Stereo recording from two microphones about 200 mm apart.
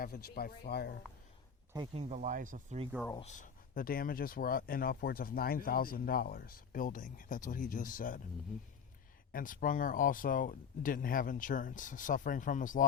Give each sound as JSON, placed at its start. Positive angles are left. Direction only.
{"t": 0.0, "sound": "speech", "side_deg": 50}
{"t": 1.7, "sound": "speech", "side_deg": -25}
{"t": 3.2, "sound": "speech", "side_deg": 35}
{"t": 9.3, "sound": "speech", "side_deg": 45}